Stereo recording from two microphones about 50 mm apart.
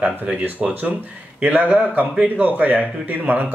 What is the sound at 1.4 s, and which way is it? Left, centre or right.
Speech, right.